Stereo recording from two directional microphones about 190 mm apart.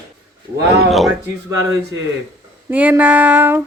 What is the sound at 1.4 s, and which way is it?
A woman's voice, 20° right (ahead or behind).